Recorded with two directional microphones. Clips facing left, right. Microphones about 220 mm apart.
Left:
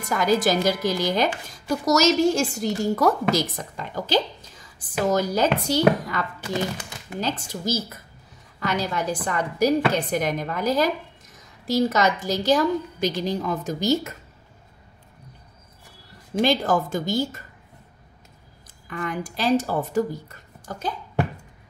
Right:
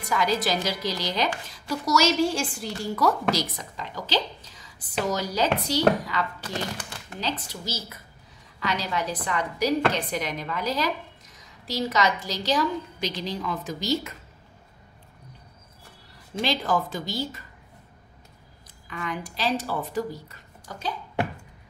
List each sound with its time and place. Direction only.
0.0 s a woman's voice: 45° left (ahead or behind)
7.2 s a woman's voice: 50° left (ahead or behind)
16.3 s a woman's voice: 45° left (ahead or behind)
18.9 s a woman's voice: 50° left (ahead or behind)